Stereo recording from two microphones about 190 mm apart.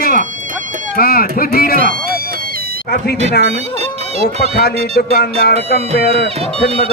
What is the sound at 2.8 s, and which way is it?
Speech, 60° left (ahead or behind).